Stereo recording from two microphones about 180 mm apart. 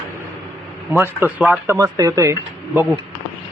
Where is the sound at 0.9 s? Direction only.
10° right (ahead or behind).